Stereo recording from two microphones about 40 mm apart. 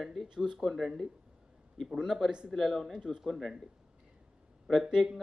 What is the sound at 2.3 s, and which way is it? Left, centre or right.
Speech, right.